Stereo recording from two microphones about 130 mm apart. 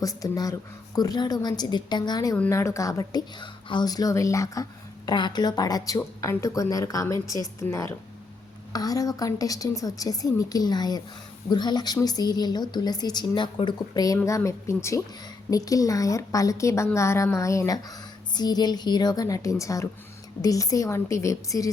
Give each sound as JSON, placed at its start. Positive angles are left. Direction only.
{"t": 0.0, "sound": "a woman's voice", "side_deg": 25}